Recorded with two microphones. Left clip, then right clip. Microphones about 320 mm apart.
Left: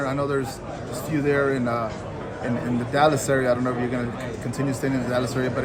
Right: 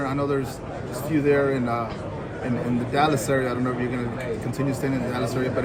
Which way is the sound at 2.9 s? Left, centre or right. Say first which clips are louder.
Left 2 dB; left.